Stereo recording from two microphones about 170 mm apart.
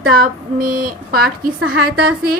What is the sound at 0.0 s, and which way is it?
Speech, 60° right (ahead or behind).